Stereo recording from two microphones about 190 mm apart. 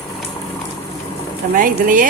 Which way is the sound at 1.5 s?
45° right (ahead or behind).